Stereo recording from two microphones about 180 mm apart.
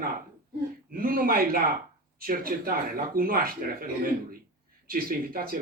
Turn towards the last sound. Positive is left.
turn(degrees=-55)  # may be behind; listen again after turning